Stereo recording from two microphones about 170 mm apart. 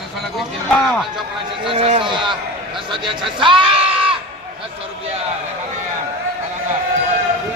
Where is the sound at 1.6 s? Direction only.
35° right (ahead or behind).